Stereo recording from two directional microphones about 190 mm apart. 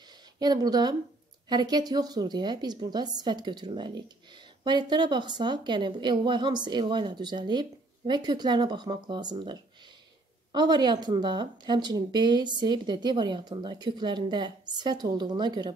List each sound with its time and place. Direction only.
0.4 s speech: 20° right (ahead or behind)